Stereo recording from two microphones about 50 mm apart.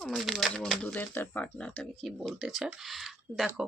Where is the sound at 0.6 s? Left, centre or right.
Centre.